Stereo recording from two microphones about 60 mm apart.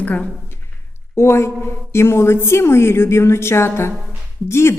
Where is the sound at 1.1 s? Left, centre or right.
Left.